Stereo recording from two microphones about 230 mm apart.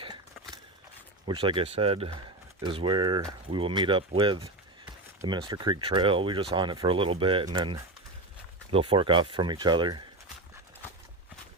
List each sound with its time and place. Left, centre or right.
1.3 s speech: right